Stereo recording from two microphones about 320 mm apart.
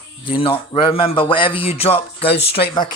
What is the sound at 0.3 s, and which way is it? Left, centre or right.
A man's voice, centre.